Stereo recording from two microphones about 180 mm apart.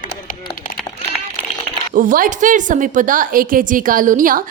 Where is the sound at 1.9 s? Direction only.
50° right (ahead or behind).